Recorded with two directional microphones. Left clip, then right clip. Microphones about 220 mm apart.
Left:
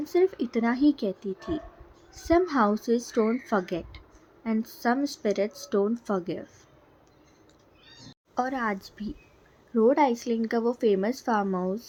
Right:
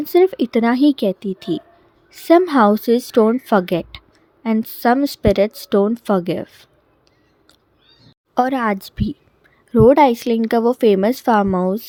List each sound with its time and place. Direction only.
0.0 s a woman's voice: 45° right (ahead or behind)
8.4 s a woman's voice: 40° right (ahead or behind)